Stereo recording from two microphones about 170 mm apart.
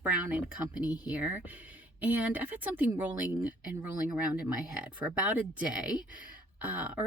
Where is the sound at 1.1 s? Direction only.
10° right (ahead or behind).